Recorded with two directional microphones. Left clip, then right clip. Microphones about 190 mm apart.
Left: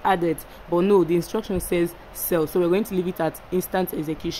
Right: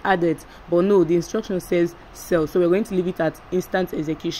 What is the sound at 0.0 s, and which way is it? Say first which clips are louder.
Speech: right 1 dB; 5° right (ahead or behind).